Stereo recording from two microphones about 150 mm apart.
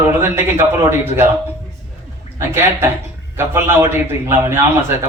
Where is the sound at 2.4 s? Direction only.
15° right (ahead or behind).